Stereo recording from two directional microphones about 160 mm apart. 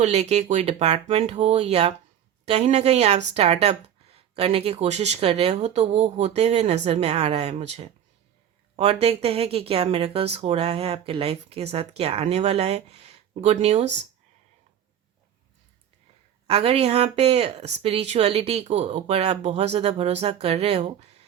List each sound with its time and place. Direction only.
0.0 s speech: 45° right (ahead or behind)
16.5 s speech: 40° right (ahead or behind)